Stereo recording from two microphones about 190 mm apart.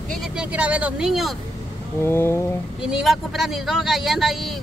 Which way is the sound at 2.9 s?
5° right (ahead or behind).